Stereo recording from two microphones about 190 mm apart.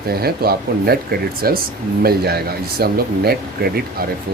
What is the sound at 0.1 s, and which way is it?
Speech, 55° right (ahead or behind).